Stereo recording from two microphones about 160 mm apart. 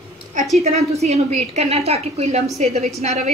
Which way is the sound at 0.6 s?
45° right (ahead or behind).